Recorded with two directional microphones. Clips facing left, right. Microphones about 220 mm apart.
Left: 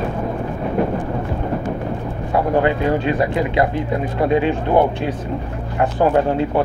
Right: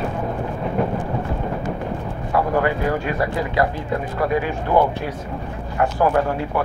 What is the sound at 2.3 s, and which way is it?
Speech, 25° left (ahead or behind).